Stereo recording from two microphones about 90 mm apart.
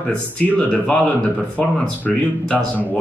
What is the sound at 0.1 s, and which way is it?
Speech, 15° left (ahead or behind).